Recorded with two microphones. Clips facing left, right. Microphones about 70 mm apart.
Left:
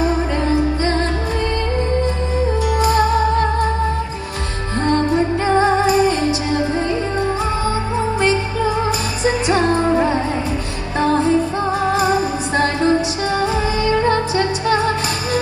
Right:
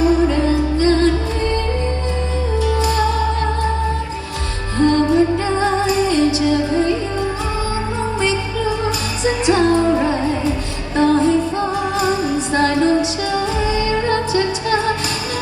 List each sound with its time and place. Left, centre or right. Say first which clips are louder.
0.0 s music: right 4 dB; left
2.6 s music: left 2 dB; left
4.8 s music: right 3 dB; left
9.2 s music: right 2 dB; left